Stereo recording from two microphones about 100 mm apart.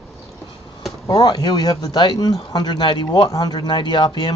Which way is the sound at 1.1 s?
40° left (ahead or behind).